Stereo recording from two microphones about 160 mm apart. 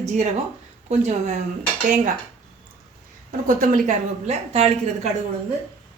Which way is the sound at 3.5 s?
55° right (ahead or behind).